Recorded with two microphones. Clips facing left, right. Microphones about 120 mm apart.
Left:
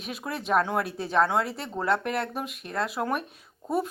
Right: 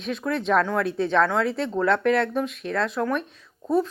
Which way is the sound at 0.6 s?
15° left (ahead or behind).